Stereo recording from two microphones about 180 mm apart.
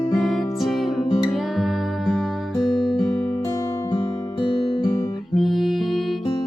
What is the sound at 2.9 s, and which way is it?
Music, 15° left (ahead or behind).